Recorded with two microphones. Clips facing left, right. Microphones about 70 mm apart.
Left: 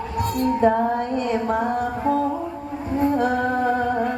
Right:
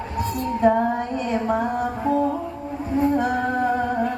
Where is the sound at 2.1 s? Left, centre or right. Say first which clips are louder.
Even; left.